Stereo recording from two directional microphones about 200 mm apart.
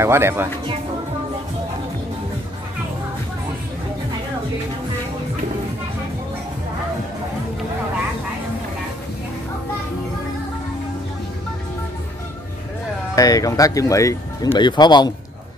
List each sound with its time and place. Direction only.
0.0 s speech: 10° right (ahead or behind)
13.1 s speech: 15° left (ahead or behind)